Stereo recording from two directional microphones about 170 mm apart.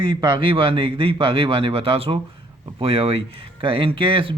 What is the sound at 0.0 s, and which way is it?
A man's voice, 30° right (ahead or behind).